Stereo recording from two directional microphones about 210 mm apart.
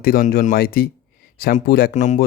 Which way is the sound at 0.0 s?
45° left (ahead or behind).